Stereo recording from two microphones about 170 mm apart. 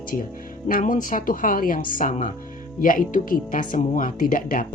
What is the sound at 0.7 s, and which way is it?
Speech, 55° left (ahead or behind).